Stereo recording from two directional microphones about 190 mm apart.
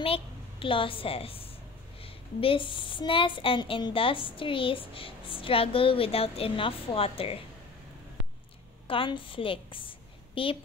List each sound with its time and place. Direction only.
0.0 s a woman's voice: 30° left (ahead or behind)
8.8 s a woman's voice: 25° left (ahead or behind)